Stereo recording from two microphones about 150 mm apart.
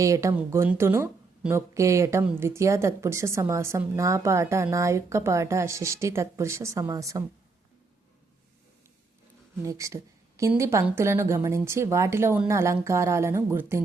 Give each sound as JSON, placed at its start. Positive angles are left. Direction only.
{"t": 0.0, "sound": "a woman's voice", "side_deg": -20}
{"t": 9.6, "sound": "a woman's voice", "side_deg": -20}